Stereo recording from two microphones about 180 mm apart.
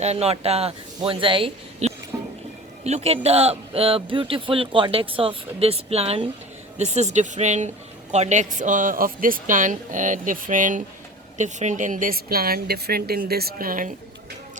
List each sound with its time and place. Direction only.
0.0 s speech: 35° right (ahead or behind)
2.1 s a sound: 15° right (ahead or behind)
2.8 s a woman's voice: 35° right (ahead or behind)